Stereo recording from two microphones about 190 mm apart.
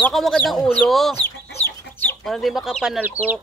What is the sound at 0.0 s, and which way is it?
Speech, centre (ahead or behind).